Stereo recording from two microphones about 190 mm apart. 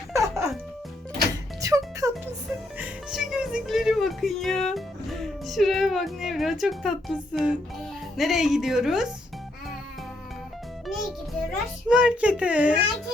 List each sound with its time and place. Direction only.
0.1 s music: 15° right (ahead or behind)
1.6 s music: 15° right (ahead or behind)
2.7 s speech: 5° right (ahead or behind)
10.8 s music: centre (ahead or behind)
11.5 s a child's voice: 5° right (ahead or behind)